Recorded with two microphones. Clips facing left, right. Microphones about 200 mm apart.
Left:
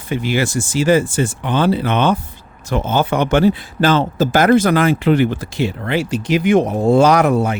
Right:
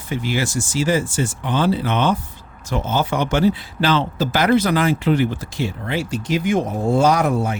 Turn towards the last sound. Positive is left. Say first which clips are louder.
# left 4 dB
turn(degrees=70)  # may be behind; listen again after turning